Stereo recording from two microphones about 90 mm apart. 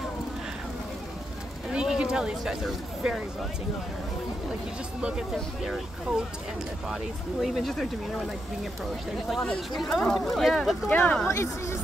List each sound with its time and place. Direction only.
1.7 s a sound: 10° right (ahead or behind)
5.0 s speech: 5° right (ahead or behind)
7.4 s speech: centre (ahead or behind)
9.4 s speech: 5° left (ahead or behind)
10.9 s speech: 15° left (ahead or behind)
11.2 s speech: 30° left (ahead or behind)